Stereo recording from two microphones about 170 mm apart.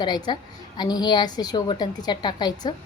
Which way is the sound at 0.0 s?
25° left (ahead or behind).